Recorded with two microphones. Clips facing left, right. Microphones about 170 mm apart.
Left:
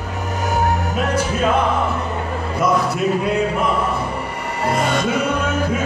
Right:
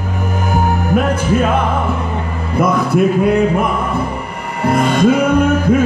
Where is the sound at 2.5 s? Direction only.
55° right (ahead or behind).